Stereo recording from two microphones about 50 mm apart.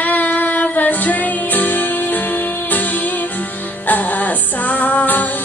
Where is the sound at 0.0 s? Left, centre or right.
Left.